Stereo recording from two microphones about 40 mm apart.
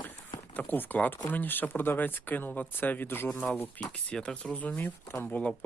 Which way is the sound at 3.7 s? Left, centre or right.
Left.